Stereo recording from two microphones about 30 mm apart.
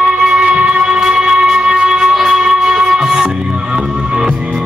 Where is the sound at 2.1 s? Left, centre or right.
Centre.